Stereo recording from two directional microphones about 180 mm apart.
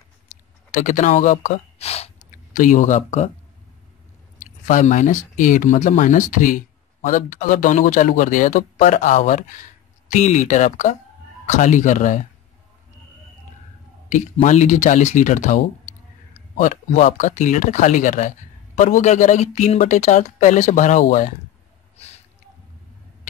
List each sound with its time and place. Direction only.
0.7 s speech: 45° left (ahead or behind)
4.4 s speech: 45° left (ahead or behind)
14.0 s speech: 45° left (ahead or behind)
21.9 s a sound: 35° left (ahead or behind)